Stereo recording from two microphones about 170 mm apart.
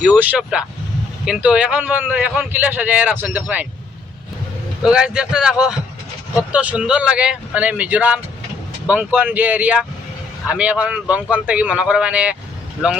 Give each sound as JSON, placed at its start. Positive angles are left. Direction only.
{"t": 0.0, "sound": "a man's voice", "side_deg": -5}
{"t": 4.8, "sound": "a man's voice", "side_deg": -5}